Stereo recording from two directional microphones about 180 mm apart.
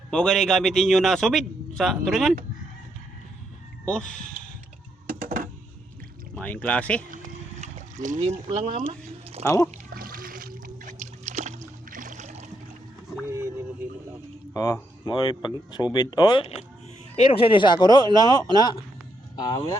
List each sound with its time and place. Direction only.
0.1 s a man's voice: 5° left (ahead or behind)
3.8 s a man's voice: 5° left (ahead or behind)
5.0 s a sound: 50° right (ahead or behind)
6.3 s speech: 10° left (ahead or behind)
7.6 s speech: 40° right (ahead or behind)
9.4 s speech: 20° left (ahead or behind)
9.7 s a sound: 55° right (ahead or behind)
11.0 s boat: 40° right (ahead or behind)
14.5 s speech: 20° left (ahead or behind)